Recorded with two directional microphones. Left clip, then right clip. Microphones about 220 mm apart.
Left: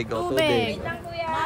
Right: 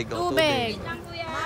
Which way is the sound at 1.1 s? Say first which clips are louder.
Left 5 dB; 35° left (ahead or behind).